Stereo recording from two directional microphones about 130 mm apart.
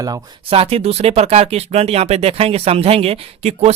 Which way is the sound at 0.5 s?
50° right (ahead or behind).